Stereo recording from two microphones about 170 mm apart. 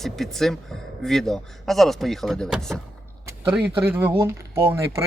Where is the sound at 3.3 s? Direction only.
10° right (ahead or behind).